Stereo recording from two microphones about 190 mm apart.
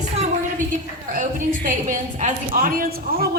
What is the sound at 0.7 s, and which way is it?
A woman's voice, 45° right (ahead or behind).